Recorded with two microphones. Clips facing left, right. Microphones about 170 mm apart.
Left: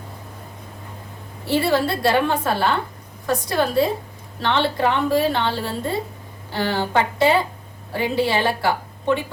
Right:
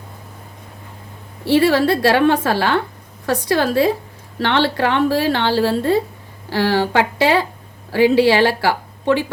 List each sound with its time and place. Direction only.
1.5 s a woman's voice: 80° right